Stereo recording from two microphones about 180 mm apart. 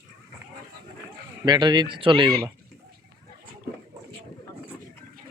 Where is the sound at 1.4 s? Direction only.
25° right (ahead or behind).